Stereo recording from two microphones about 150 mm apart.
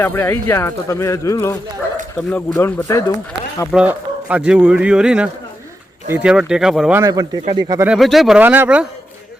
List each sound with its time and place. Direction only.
0.0 s speech: 15° left (ahead or behind)
2.1 s speech: 10° left (ahead or behind)
3.7 s a man's voice: 5° right (ahead or behind)
6.9 s speech: 20° right (ahead or behind)
7.9 s speech: centre (ahead or behind)
8.4 s a man's voice: 10° right (ahead or behind)